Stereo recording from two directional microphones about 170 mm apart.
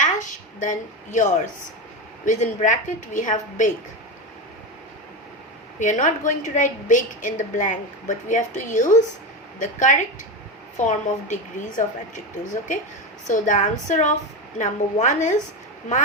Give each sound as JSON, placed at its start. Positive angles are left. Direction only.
{"t": 0.6, "sound": "a woman's voice", "side_deg": 45}
{"t": 5.8, "sound": "a woman's voice", "side_deg": 45}